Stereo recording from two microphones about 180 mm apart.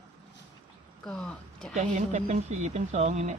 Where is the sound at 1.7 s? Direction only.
40° right (ahead or behind).